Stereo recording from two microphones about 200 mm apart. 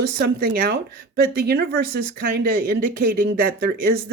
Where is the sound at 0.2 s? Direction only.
45° right (ahead or behind).